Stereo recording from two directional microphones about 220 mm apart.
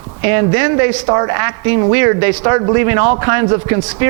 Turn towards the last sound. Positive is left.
turn(degrees=-15)  # may be behind; listen again after turning